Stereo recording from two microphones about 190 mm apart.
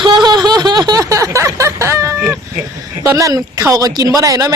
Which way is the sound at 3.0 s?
15° right (ahead or behind).